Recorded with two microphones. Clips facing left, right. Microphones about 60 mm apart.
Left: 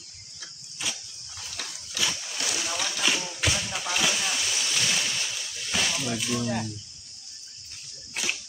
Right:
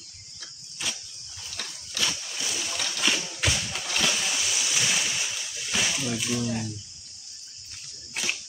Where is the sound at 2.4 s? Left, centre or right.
Left.